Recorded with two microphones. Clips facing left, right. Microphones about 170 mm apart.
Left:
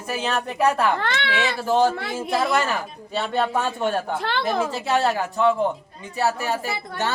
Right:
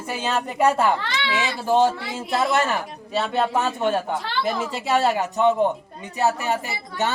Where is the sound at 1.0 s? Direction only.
55° left (ahead or behind).